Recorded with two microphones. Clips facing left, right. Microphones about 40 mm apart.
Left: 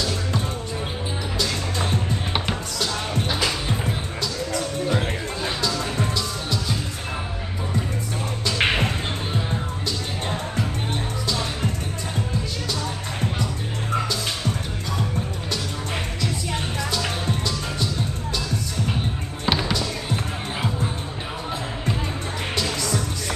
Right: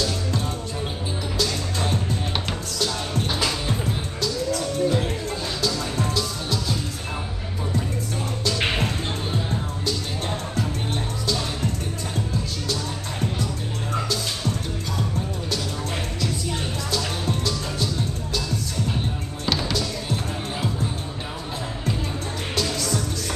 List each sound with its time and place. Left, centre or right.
1.4 s music: centre
4.8 s music: left
8.5 s music: left
11.2 s music: centre
16.9 s music: centre
19.7 s basketball bounce: centre
22.6 s music: centre